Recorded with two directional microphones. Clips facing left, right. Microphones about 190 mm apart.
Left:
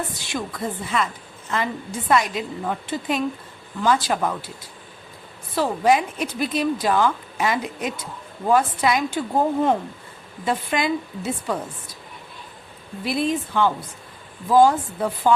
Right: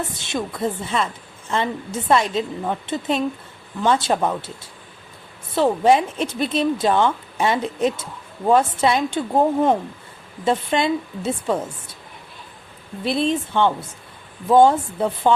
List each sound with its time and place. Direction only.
0.2 s a woman's voice: 25° right (ahead or behind)
5.5 s a woman's voice: 25° right (ahead or behind)
13.1 s a woman's voice: 25° right (ahead or behind)